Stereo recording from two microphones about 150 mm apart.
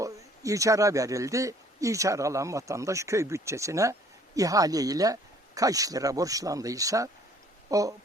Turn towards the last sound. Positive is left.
turn(degrees=-25)  # may be behind; listen again after turning